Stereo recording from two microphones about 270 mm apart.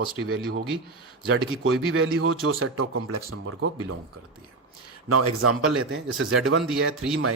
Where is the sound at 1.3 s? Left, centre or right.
Right.